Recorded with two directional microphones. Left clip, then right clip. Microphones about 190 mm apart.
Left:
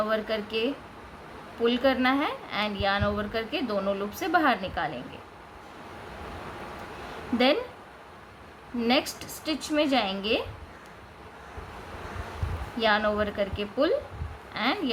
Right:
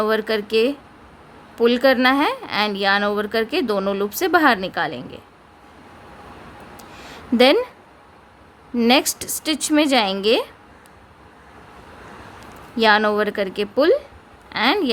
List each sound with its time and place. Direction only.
0.0 s a woman's voice: 65° right (ahead or behind)
7.3 s a woman's voice: 65° right (ahead or behind)
8.8 s a woman's voice: 65° right (ahead or behind)
12.7 s a woman's voice: 65° right (ahead or behind)